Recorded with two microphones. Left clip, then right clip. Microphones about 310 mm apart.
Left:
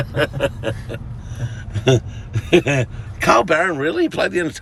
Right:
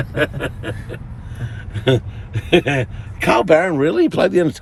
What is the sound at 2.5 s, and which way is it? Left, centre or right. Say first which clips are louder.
A man's voice: even; centre.